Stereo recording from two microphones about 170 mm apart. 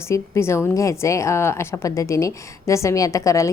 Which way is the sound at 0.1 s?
15° left (ahead or behind).